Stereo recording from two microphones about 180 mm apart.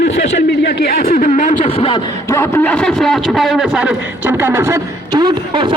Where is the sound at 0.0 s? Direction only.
80° left.